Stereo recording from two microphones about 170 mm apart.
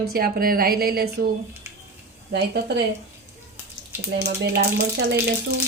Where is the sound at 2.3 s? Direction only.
75° right (ahead or behind).